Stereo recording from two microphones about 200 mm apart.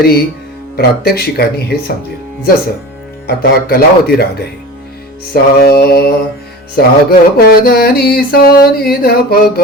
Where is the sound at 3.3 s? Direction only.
50° left (ahead or behind).